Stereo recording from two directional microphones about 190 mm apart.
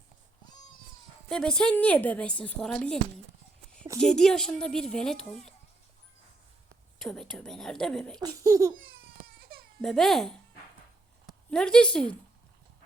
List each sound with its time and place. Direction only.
0.4 s baby cry: 20° left (ahead or behind)
1.3 s speech: 5° left (ahead or behind)
4.0 s speech: 5° left (ahead or behind)
7.0 s speech: 5° left (ahead or behind)
8.2 s speech: 15° right (ahead or behind)
9.0 s baby cry: 50° right (ahead or behind)
9.8 s speech: centre (ahead or behind)
11.5 s speech: 5° left (ahead or behind)